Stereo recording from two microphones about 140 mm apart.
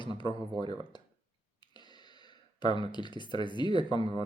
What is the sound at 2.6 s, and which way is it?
Speech, 30° left (ahead or behind).